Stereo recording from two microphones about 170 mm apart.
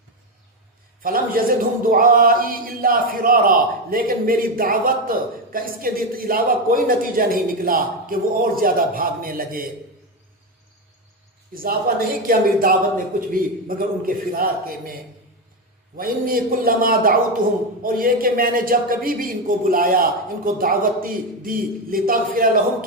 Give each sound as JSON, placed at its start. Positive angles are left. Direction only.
{"t": 1.0, "sound": "speech", "side_deg": -55}
{"t": 11.5, "sound": "speech", "side_deg": -60}
{"t": 16.0, "sound": "speech", "side_deg": -55}